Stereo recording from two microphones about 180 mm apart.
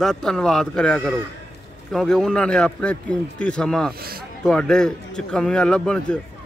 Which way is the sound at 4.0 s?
55° right (ahead or behind).